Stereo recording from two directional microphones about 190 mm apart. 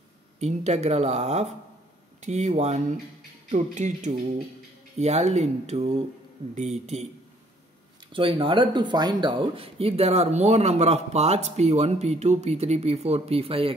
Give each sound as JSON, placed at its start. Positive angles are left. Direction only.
{"t": 0.4, "sound": "speech", "side_deg": -35}
{"t": 8.1, "sound": "speech", "side_deg": -25}